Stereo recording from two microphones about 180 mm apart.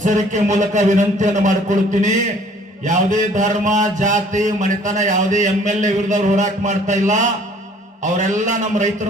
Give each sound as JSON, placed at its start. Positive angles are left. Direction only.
{"t": 0.0, "sound": "speech", "side_deg": -45}